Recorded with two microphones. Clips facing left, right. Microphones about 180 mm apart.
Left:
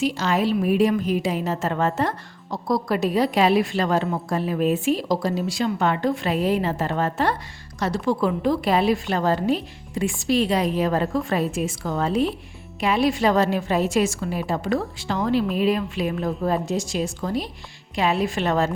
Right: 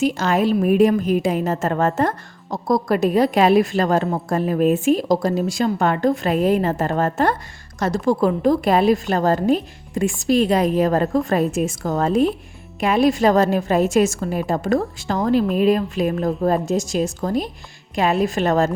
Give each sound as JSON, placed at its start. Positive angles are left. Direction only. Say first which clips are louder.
{"t": 0.0, "sound": "a woman's voice", "louder": "right 3 dB", "side_deg": -50}